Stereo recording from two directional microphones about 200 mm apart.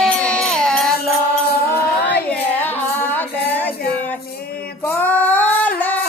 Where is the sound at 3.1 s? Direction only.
10° left (ahead or behind).